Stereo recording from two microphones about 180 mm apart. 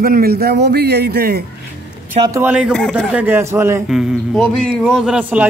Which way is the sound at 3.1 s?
10° right (ahead or behind).